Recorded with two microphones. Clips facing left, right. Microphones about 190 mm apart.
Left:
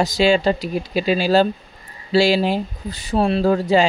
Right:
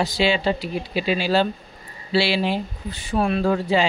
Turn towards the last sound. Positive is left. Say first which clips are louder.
# left 4 dB
turn(degrees=40)  # may be behind; listen again after turning